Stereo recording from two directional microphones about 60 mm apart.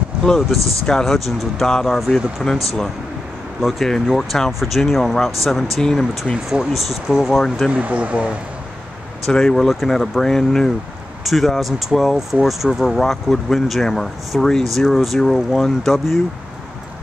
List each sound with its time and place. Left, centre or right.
0.4 s speech: centre
3.6 s speech: centre
7.7 s speech: right
9.3 s speech: centre